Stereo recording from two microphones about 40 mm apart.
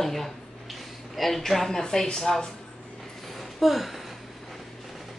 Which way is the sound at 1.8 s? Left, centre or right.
Centre.